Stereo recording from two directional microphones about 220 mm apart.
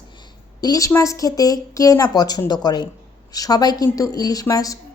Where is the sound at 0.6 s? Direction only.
15° left (ahead or behind).